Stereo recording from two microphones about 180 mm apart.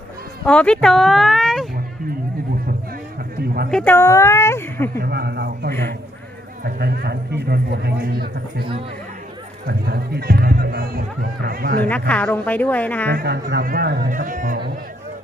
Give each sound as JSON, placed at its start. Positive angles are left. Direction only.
{"t": 0.4, "sound": "speech", "side_deg": 5}
{"t": 3.7, "sound": "speech", "side_deg": 5}
{"t": 3.9, "sound": "a woman's voice", "side_deg": 15}
{"t": 4.9, "sound": "speech", "side_deg": -60}
{"t": 9.6, "sound": "speech", "side_deg": -60}
{"t": 11.9, "sound": "a woman's voice", "side_deg": 10}
{"t": 13.1, "sound": "speech", "side_deg": -65}